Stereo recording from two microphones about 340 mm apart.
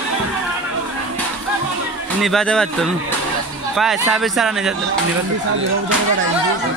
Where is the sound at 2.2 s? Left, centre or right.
Centre.